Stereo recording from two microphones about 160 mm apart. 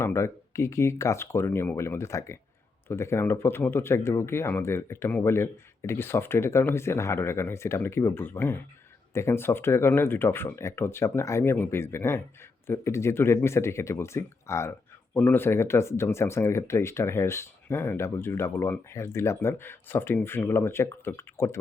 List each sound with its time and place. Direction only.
0.0 s speech: 15° left (ahead or behind)